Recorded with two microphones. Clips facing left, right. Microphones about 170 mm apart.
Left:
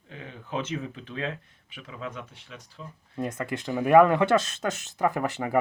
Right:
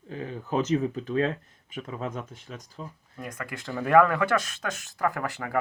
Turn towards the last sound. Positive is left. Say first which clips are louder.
# left 3 dB
turn(degrees=20)  # may be behind; listen again after turning